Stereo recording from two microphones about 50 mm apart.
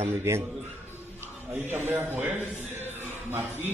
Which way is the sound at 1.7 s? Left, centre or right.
Right.